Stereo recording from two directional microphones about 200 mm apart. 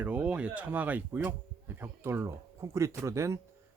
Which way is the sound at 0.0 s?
5° right (ahead or behind).